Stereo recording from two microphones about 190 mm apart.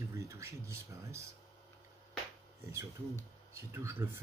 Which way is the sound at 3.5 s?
15° right (ahead or behind).